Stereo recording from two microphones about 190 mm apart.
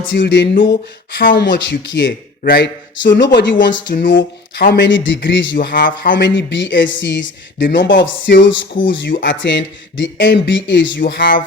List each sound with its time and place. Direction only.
0.1 s speech: 70° left (ahead or behind)
2.4 s speech: 60° left (ahead or behind)
5.5 s speech: 45° left (ahead or behind); by 11.0 s 70° left (ahead or behind)
11.0 s speech: 50° left (ahead or behind)